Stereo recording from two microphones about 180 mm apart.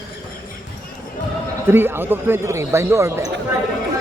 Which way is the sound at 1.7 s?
10° right (ahead or behind).